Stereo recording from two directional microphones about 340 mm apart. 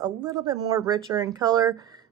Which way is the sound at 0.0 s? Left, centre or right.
Centre.